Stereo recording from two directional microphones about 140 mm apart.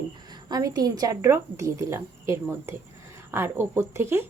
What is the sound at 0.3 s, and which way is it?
A woman's voice, 30° right (ahead or behind).